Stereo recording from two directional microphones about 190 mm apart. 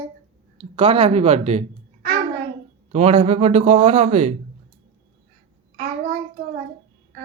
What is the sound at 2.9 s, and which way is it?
Speech, 35° right (ahead or behind).